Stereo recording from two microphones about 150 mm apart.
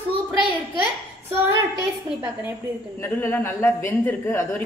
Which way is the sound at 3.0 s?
15° left (ahead or behind).